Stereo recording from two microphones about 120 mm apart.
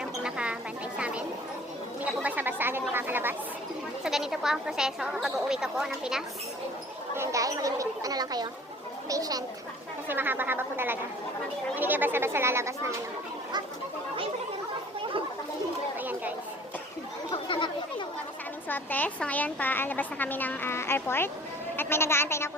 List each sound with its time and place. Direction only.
0.0 s a sound: 5° right (ahead or behind)
2.9 s chatter: 15° right (ahead or behind)
4.0 s speech: 5° right (ahead or behind)
7.2 s speech: 25° right (ahead or behind)
10.1 s speech: 15° right (ahead or behind)
16.0 s chatter: 15° right (ahead or behind)
17.3 s chatter: 45° left (ahead or behind)
18.7 s speech: 15° left (ahead or behind)